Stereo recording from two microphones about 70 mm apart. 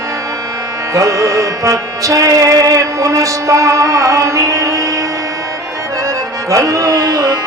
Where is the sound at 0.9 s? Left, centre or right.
Right.